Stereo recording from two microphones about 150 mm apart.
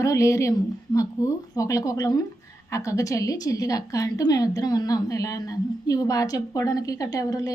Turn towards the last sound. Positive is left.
turn(degrees=25)  # may be behind; listen again after turning